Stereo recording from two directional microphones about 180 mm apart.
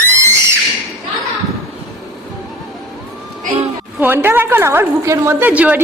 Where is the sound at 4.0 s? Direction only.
10° right (ahead or behind).